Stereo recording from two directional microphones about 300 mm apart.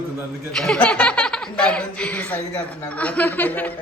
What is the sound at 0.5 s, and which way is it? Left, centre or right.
Speech, centre.